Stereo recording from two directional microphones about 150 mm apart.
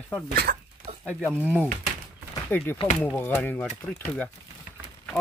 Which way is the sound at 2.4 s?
15° left (ahead or behind).